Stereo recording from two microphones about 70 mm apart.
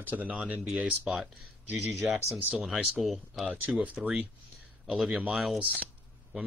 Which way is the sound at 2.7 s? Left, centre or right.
Centre.